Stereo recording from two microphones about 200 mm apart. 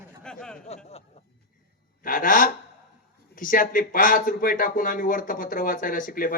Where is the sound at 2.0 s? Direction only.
45° left (ahead or behind).